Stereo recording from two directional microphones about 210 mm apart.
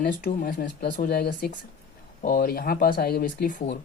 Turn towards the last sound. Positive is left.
turn(degrees=40)  # may be behind; listen again after turning